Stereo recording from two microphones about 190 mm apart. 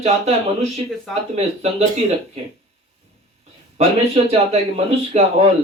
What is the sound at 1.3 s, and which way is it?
Speech, 35° right (ahead or behind).